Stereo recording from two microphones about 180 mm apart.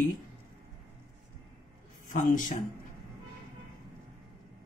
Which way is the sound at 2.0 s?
45° left (ahead or behind).